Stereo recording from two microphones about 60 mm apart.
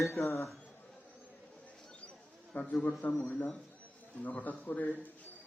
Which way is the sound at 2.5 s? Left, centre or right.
Left.